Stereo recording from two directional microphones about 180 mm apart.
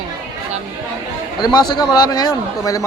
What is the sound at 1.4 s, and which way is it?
A man's voice, 20° left (ahead or behind).